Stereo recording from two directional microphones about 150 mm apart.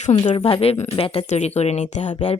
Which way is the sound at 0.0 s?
50° left (ahead or behind).